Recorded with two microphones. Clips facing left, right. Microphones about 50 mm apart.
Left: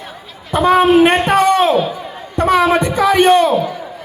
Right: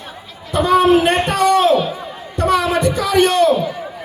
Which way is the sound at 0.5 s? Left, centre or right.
Left.